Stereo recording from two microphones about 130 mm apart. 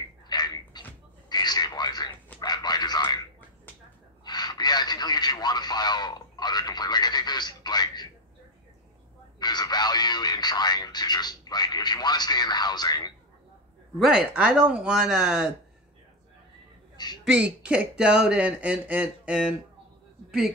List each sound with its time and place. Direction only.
0.3 s a sound: 30° left (ahead or behind)
2.4 s radio: 30° left (ahead or behind)
4.2 s radio: 30° left (ahead or behind)
9.4 s radio: 35° left (ahead or behind)
13.9 s speech: 5° right (ahead or behind)
16.9 s a sound: 35° left (ahead or behind)
17.2 s a man's voice: 5° right (ahead or behind)